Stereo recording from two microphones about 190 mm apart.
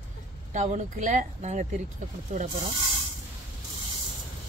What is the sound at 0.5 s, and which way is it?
Speech, 40° right (ahead or behind).